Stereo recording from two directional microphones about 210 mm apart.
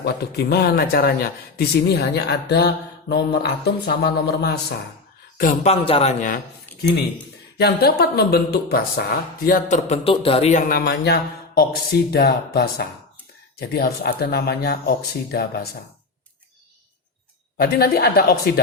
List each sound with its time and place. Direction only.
0.0 s speech: 50° left (ahead or behind)
5.4 s speech: 35° left (ahead or behind)
7.6 s speech: 50° left (ahead or behind); by 10.6 s 30° left (ahead or behind)
10.7 s speech: 50° left (ahead or behind)
17.6 s speech: 50° left (ahead or behind)